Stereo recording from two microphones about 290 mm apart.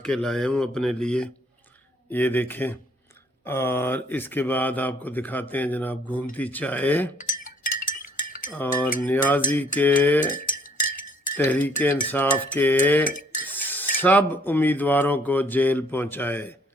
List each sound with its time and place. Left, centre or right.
0.0 s speech: centre
7.2 s a sound: left
8.5 s speech: centre
10.3 s chink: left
11.3 s speech: centre
13.1 s dishes: left
13.6 s speech: centre